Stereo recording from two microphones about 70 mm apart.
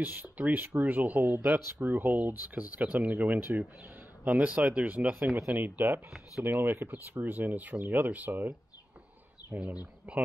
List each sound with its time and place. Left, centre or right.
0.0 s speech: right
10.1 s speech: centre